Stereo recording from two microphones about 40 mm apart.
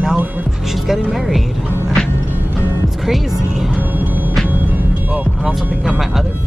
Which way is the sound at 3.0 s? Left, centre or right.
Centre.